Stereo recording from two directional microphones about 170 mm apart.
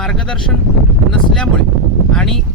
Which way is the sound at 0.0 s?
5° left (ahead or behind).